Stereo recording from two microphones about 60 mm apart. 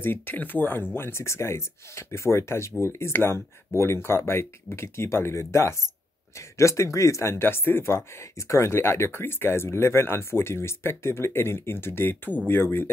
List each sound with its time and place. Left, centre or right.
0.0 s speech: left
0.9 s speech: left
8.4 s speech: left